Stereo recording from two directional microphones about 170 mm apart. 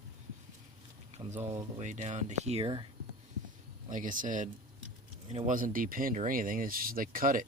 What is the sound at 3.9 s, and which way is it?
Speech, 50° right (ahead or behind).